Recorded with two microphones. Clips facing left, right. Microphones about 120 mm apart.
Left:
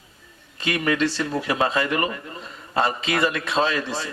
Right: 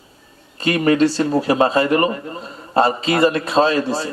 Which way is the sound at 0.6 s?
35° right (ahead or behind).